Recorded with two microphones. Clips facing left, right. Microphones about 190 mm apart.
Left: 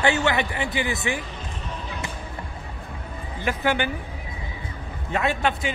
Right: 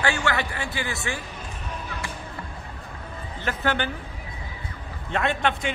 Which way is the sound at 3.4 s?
15° left (ahead or behind).